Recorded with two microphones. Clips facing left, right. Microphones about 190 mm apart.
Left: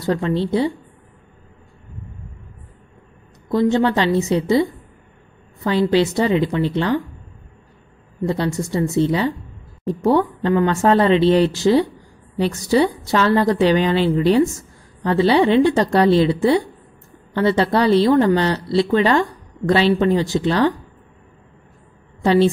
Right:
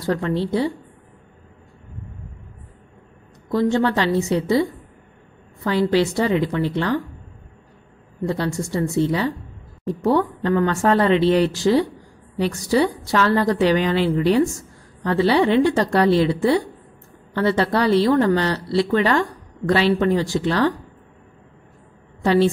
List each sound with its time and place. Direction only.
0.0 s a woman's voice: 25° left (ahead or behind)
3.5 s a woman's voice: 20° left (ahead or behind)
8.3 s a woman's voice: 20° left (ahead or behind)
22.2 s a woman's voice: 25° left (ahead or behind)